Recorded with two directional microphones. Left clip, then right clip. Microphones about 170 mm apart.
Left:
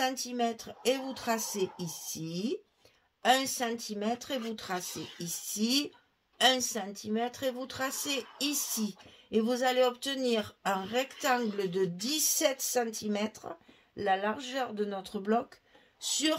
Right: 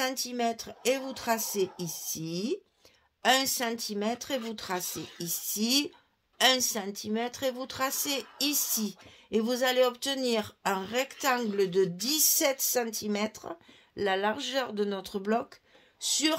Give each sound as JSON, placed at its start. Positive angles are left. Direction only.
{"t": 0.0, "sound": "a woman's voice", "side_deg": -45}